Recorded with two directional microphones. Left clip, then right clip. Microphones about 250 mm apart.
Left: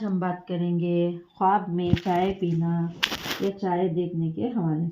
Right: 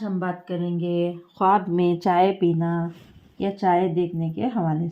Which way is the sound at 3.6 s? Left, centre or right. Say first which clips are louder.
Right 9 dB; right.